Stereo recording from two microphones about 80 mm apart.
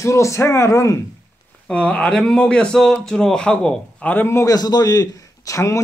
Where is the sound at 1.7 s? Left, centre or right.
Centre.